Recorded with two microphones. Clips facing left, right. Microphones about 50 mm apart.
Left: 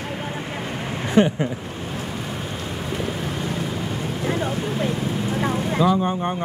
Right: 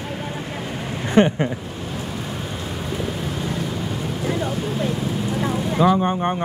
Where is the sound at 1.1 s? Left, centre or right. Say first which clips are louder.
Right 2 dB; right.